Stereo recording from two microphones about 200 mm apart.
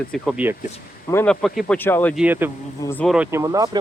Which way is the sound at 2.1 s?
10° right (ahead or behind).